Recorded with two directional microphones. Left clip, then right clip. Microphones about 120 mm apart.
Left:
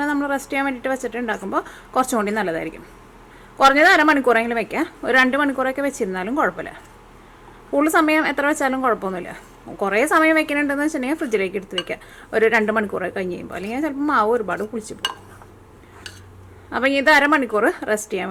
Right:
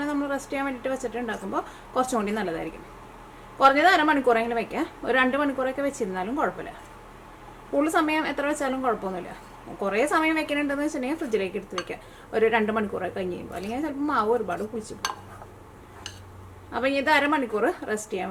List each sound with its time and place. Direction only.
0.0 s a woman's voice: 40° left (ahead or behind)
7.8 s a woman's voice: 35° left (ahead or behind)
16.7 s a woman's voice: 40° left (ahead or behind)